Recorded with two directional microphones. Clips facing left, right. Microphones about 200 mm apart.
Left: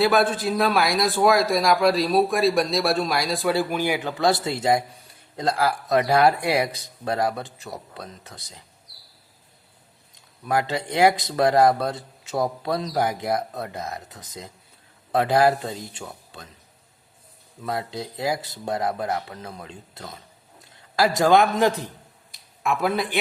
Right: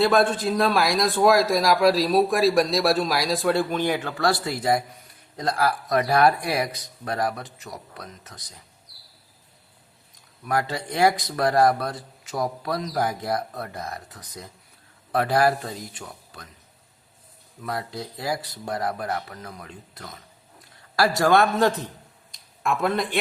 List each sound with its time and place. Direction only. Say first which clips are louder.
0.0 s a man's voice: even; 5° left (ahead or behind); by 8.6 s 25° left (ahead or behind)
10.4 s a man's voice: left 2 dB; 25° left (ahead or behind)
17.6 s a man's voice: left 2 dB; 25° left (ahead or behind)
22.3 s a sound: left 1 dB; 5° left (ahead or behind)